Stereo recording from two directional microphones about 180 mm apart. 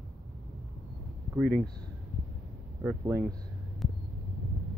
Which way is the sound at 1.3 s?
5° right (ahead or behind).